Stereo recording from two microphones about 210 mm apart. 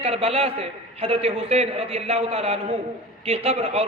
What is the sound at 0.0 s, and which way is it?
A man's voice, 30° right (ahead or behind).